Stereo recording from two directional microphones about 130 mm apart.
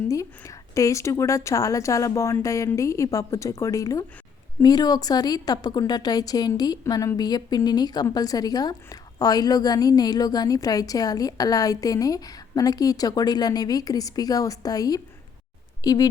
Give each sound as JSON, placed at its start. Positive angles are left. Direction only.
{"t": 0.1, "sound": "a woman's voice", "side_deg": 25}